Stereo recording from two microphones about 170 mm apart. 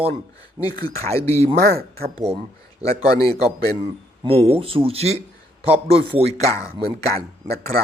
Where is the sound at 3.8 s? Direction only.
35° right (ahead or behind).